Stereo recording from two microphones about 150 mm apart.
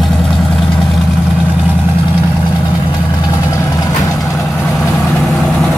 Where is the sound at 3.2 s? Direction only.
25° left (ahead or behind).